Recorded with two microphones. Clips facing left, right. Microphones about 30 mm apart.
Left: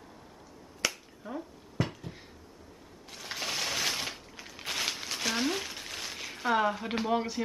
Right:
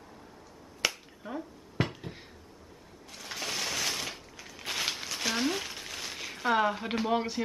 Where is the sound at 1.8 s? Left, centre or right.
Right.